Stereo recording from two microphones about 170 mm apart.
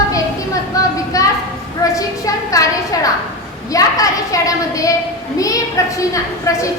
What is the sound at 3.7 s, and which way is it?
A woman's voice, 20° left (ahead or behind).